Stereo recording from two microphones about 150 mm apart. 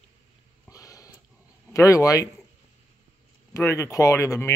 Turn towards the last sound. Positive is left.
turn(degrees=20)  # may be behind; listen again after turning